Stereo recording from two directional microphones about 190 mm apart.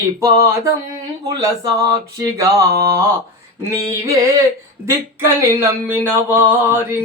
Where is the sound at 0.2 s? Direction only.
15° right (ahead or behind).